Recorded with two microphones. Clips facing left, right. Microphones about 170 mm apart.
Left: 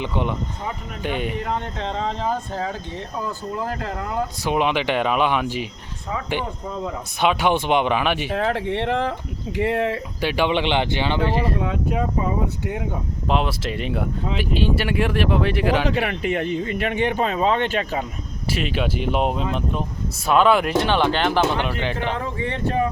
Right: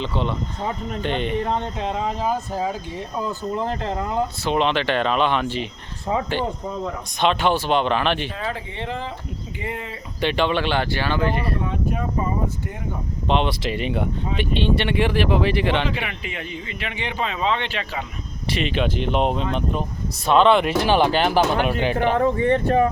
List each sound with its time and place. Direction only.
0.0 s speech: 15° left (ahead or behind)
1.8 s speech: 10° right (ahead or behind)
3.2 s speech: 20° right (ahead or behind)
4.4 s speech: 10° left (ahead or behind)
7.2 s speech: 10° left (ahead or behind)
8.3 s speech: 70° left (ahead or behind)
10.2 s speech: 10° left (ahead or behind)
11.3 s speech: 90° left; by 12.7 s 75° left (ahead or behind)
13.2 s speech: 5° left (ahead or behind)
16.0 s speech: 50° left (ahead or behind)
18.4 s speech: 5° left (ahead or behind); by 21.9 s 10° right (ahead or behind)
22.1 s speech: 50° right (ahead or behind)